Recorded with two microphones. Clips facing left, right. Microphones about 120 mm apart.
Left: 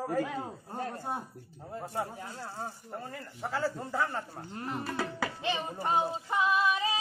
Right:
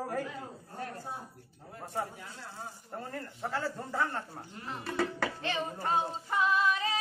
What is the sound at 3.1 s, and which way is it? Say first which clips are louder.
A man's voice: right 1 dB; 5° left (ahead or behind).